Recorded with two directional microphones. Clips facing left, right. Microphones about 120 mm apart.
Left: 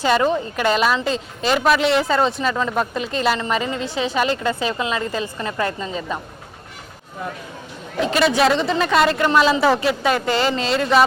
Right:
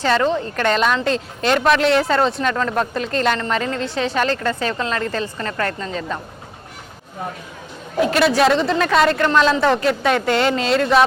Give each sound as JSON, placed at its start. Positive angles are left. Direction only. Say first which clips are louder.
{"t": 0.0, "sound": "a woman's voice", "louder": "even", "side_deg": 10}
{"t": 7.9, "sound": "a woman's voice", "louder": "right 2 dB", "side_deg": -5}